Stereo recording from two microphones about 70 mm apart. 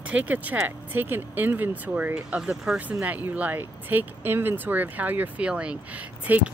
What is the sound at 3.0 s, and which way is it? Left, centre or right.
Speech, right.